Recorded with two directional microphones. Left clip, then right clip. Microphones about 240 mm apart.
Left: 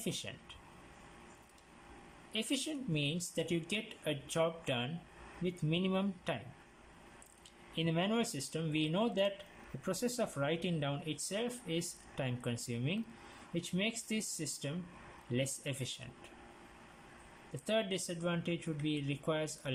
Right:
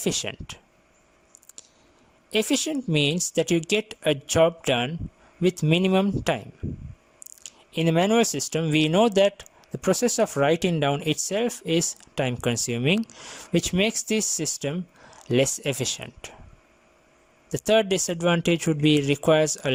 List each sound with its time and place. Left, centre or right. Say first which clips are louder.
0.0 s speech: right 15 dB; right
2.3 s speech: right 14 dB; right
7.4 s speech: right 13 dB; right
17.7 s speech: right 15 dB; right